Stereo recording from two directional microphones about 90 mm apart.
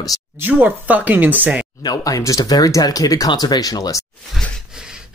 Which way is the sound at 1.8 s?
45° left (ahead or behind).